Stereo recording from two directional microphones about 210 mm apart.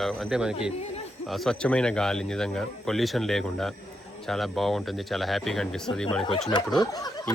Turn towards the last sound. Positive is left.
turn(degrees=20)  # may be behind; listen again after turning